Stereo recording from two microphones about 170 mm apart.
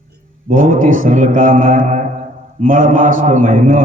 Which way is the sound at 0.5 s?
50° right (ahead or behind).